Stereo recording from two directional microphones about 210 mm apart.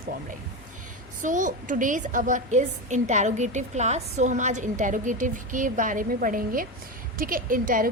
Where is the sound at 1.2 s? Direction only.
35° right (ahead or behind).